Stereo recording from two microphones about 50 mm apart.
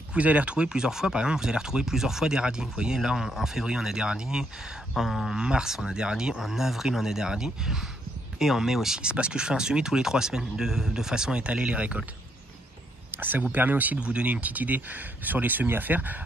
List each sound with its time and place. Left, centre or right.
0.1 s speech: right
4.9 s speech: centre
9.0 s speech: right
13.1 s speech: right
13.9 s speech: right